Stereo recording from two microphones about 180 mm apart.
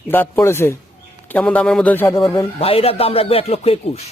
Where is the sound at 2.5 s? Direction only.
35° left (ahead or behind).